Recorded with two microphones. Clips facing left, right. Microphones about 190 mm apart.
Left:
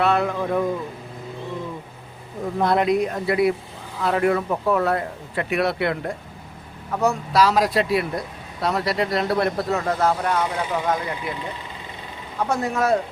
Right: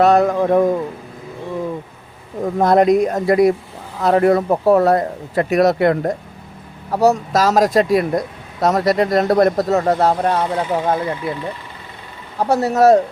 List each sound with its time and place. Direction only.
0.0 s speech: 40° right (ahead or behind)
2.4 s speech: 45° right (ahead or behind)
12.4 s speech: 35° right (ahead or behind)